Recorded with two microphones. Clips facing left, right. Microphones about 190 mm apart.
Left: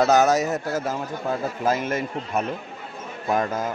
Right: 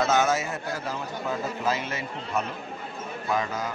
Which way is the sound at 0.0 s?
40° left (ahead or behind).